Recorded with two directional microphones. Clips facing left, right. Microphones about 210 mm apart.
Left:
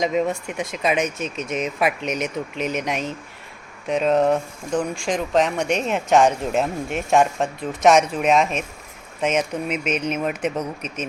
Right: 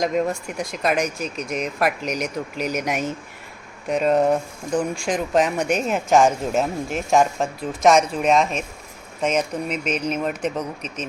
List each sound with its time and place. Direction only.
0.0 s speech: centre (ahead or behind)
4.3 s speech: 15° right (ahead or behind)
5.0 s speech: 5° right (ahead or behind)
10.8 s a man's voice: 30° right (ahead or behind)